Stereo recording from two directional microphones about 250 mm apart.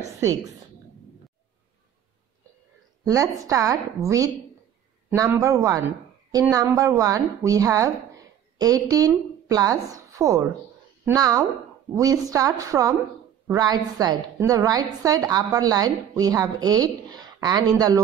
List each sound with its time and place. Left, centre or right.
3.1 s a woman's voice: centre